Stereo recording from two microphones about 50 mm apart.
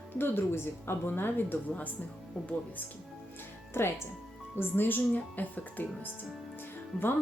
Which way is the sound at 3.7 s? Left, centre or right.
Left.